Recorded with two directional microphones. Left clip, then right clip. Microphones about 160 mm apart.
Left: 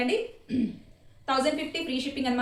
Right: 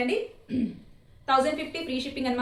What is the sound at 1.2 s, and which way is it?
A woman's voice, 30° left (ahead or behind).